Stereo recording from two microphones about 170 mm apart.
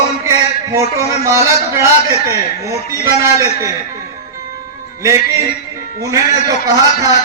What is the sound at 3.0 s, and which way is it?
Speech, 15° right (ahead or behind).